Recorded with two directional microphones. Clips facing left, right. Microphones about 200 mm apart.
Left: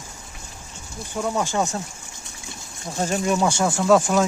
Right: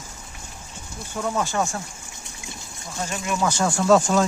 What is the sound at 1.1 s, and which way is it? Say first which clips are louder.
Speech: left 1 dB; 10° left (ahead or behind).